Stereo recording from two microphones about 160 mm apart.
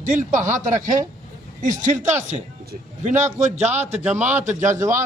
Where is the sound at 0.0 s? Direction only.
50° right (ahead or behind).